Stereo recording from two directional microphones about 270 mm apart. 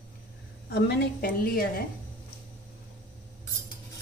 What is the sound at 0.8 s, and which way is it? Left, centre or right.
Speech, left.